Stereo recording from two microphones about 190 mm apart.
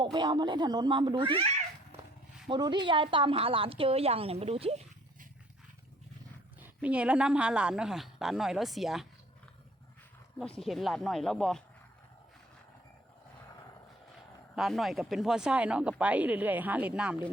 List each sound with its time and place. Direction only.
0.0 s a woman's voice: 20° right (ahead or behind)
6.6 s speech: 5° right (ahead or behind)
10.3 s speech: centre (ahead or behind)
14.5 s speech: centre (ahead or behind)